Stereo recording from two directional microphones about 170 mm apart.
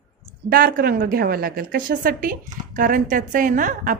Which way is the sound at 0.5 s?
60° right (ahead or behind).